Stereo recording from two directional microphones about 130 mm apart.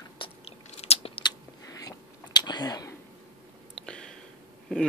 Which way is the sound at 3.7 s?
5° left (ahead or behind).